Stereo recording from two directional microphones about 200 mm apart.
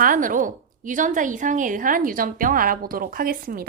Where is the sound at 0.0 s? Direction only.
45° right (ahead or behind).